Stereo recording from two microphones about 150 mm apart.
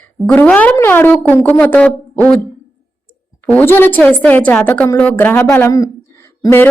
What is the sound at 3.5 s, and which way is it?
A woman's voice, 10° left (ahead or behind).